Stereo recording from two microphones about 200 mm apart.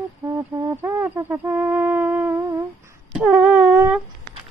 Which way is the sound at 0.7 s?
10° right (ahead or behind).